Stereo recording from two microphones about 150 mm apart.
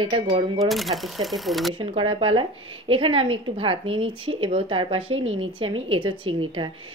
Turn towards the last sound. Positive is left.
turn(degrees=-35)  # may be behind; listen again after turning